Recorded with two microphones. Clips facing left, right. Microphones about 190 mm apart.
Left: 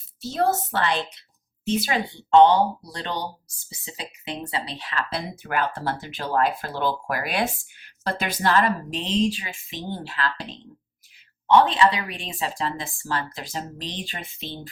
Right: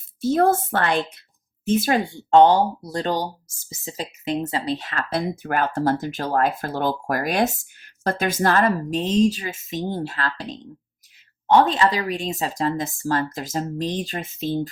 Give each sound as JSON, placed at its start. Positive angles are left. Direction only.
{"t": 0.2, "sound": "speech", "side_deg": -50}
{"t": 11.6, "sound": "speech", "side_deg": -40}